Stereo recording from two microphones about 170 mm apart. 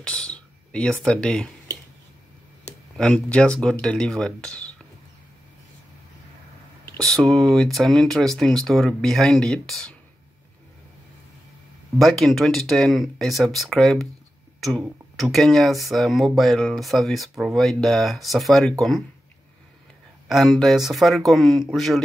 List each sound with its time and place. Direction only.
0.0 s speech: 5° left (ahead or behind)
2.7 s a sound: 40° left (ahead or behind)
3.0 s speech: 5° left (ahead or behind)
7.1 s speech: centre (ahead or behind)
12.0 s speech: centre (ahead or behind)
20.2 s speech: centre (ahead or behind)